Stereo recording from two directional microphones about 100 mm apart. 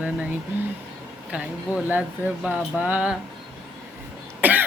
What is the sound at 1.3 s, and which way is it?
Speech, 10° right (ahead or behind).